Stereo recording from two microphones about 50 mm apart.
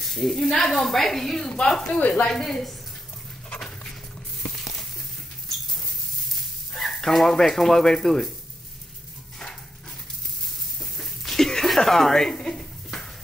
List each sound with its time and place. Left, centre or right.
0.0 s speech: centre
2.0 s speech: left
2.2 s a woman's voice: centre
6.7 s speech: centre
10.8 s a sound: centre